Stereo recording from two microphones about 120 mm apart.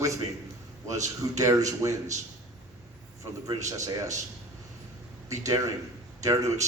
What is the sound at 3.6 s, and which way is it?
Speech, 25° right (ahead or behind).